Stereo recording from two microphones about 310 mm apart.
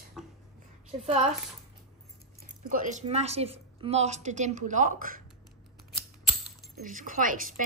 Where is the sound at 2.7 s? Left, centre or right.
Right.